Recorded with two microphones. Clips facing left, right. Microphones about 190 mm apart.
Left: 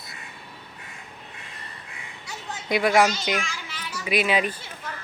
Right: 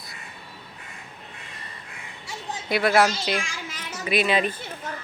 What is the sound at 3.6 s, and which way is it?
Children playing, 45° right (ahead or behind).